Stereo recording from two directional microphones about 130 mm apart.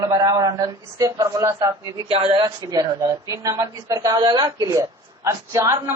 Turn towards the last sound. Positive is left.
turn(degrees=-25)  # may be behind; listen again after turning